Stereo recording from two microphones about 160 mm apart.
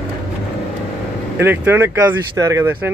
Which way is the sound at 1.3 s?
15° right (ahead or behind).